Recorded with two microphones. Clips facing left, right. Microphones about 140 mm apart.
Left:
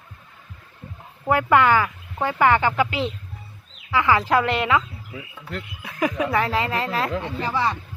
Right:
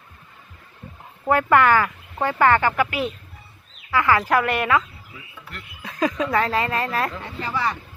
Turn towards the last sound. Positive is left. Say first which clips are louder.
# left 2 dB
turn(degrees=25)  # may be behind; listen again after turning